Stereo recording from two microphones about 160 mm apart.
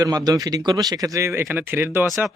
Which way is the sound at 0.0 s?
20° right (ahead or behind).